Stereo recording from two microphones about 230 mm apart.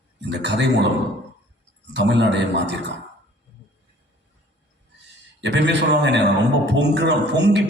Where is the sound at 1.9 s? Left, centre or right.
Right.